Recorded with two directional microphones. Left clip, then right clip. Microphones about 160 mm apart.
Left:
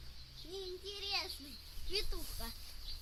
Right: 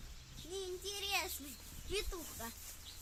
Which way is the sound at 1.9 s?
30° right (ahead or behind).